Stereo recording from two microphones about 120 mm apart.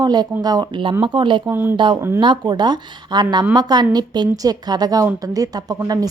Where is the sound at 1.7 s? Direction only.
40° right (ahead or behind).